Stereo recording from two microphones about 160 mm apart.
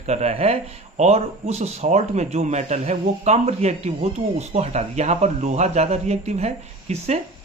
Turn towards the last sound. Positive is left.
turn(degrees=-45)  # may be behind; listen again after turning